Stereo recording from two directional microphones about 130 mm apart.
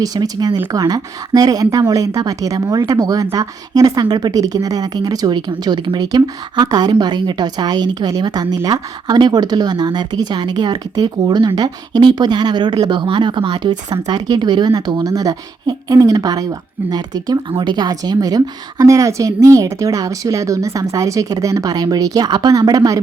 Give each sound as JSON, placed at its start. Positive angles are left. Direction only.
{"t": 0.0, "sound": "a woman's voice", "side_deg": -30}